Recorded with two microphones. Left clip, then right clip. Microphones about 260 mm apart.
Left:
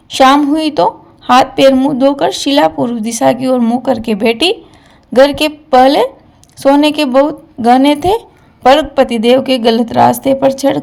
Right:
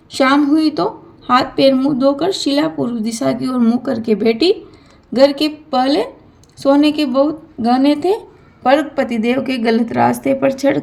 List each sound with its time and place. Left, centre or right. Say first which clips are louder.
0.1 s speech: left 5 dB; left